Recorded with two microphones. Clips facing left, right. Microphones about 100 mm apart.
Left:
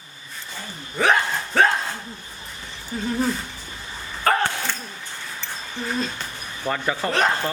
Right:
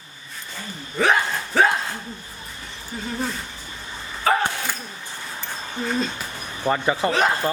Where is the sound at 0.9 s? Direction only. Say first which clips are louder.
Even; centre (ahead or behind).